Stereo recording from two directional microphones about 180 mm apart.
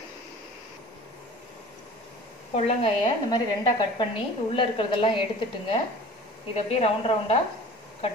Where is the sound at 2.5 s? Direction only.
35° left (ahead or behind).